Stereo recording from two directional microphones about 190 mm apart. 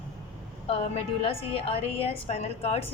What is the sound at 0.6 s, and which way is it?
A woman's voice, 30° left (ahead or behind).